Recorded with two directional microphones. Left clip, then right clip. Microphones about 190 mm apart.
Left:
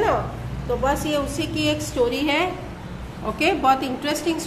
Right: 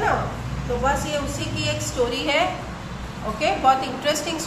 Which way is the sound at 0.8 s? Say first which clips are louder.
Left 1 dB; 25° left (ahead or behind).